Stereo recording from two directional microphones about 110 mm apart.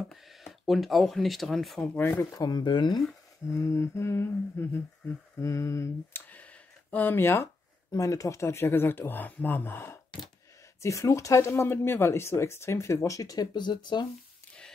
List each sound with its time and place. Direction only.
0.1 s speech: centre (ahead or behind)
1.8 s speech: 20° left (ahead or behind)
2.3 s speech: 40° left (ahead or behind)
3.4 s speech: 25° left (ahead or behind)
6.2 s a sound: 15° left (ahead or behind)
7.9 s speech: 30° left (ahead or behind)